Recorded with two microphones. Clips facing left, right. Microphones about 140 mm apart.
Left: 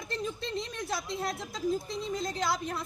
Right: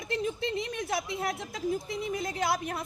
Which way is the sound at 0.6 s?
65° right (ahead or behind).